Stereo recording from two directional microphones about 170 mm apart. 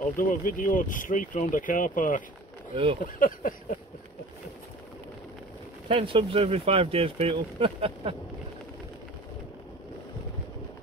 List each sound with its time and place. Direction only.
0.1 s speech: 55° left (ahead or behind)
2.7 s speech: 30° right (ahead or behind)
3.0 s speech: 55° left (ahead or behind)
5.9 s speech: 30° right (ahead or behind)